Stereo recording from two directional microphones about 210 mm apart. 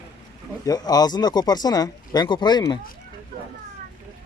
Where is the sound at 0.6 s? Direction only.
20° left (ahead or behind).